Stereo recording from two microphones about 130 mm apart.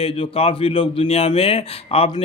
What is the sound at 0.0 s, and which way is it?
A man's voice, 45° left (ahead or behind).